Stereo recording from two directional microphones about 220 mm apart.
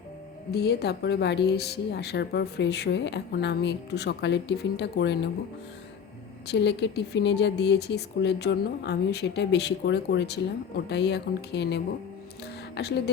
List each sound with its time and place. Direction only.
0.5 s speech: 50° left (ahead or behind)
6.5 s speech: 50° left (ahead or behind)